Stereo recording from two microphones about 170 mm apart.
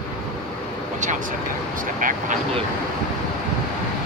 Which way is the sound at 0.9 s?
50° right (ahead or behind).